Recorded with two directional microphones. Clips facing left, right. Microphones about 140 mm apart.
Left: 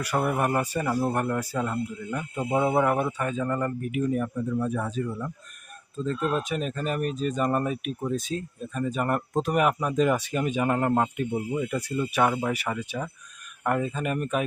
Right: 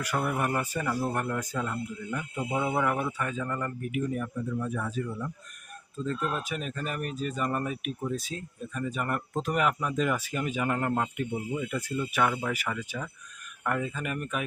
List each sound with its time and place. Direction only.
0.1 s speech: 35° left (ahead or behind)
0.8 s speech: 25° left (ahead or behind)
6.1 s speech: 30° left (ahead or behind)